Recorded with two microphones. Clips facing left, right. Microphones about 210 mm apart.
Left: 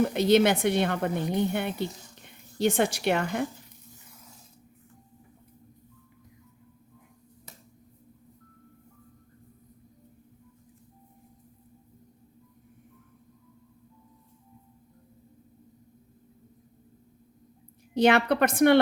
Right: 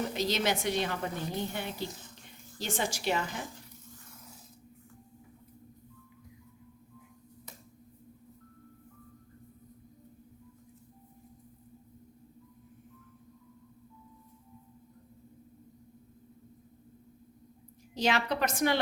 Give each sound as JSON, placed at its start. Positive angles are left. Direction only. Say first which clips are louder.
{"t": 0.1, "sound": "a woman's voice", "louder": "left 9 dB", "side_deg": 60}
{"t": 17.9, "sound": "a woman's voice", "louder": "left 8 dB", "side_deg": 60}